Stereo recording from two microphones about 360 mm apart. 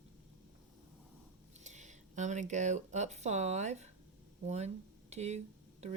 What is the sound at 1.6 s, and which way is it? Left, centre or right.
Speech, centre.